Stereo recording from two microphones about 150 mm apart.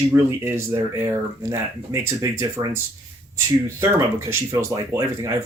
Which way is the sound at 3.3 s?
15° right (ahead or behind).